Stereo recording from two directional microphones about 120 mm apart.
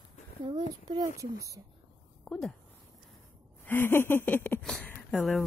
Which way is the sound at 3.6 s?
20° left (ahead or behind).